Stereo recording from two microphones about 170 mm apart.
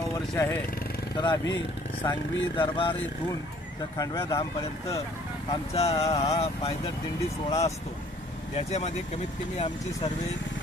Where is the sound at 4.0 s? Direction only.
20° left (ahead or behind).